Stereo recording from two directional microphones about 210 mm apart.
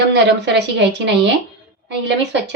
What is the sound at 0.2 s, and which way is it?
A woman's voice, 55° right (ahead or behind).